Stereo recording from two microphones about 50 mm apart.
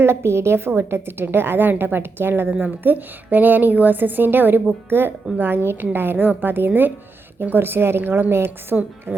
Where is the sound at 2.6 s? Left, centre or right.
Right.